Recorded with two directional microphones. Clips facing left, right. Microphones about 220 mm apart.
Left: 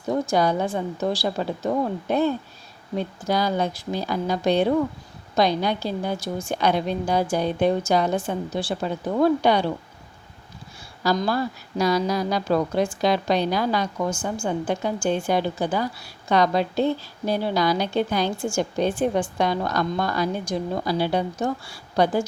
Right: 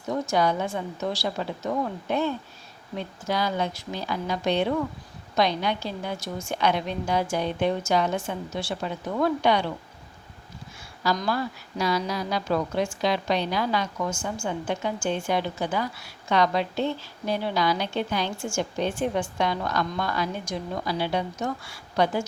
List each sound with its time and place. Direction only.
0.1 s a woman's voice: 35° left (ahead or behind)
11.3 s a woman's voice: 40° left (ahead or behind)